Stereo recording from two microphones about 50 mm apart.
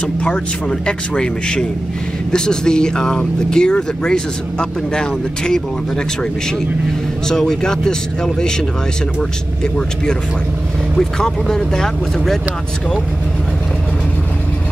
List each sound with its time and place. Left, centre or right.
0.0 s speech: left
7.2 s speech: centre
11.0 s speech: centre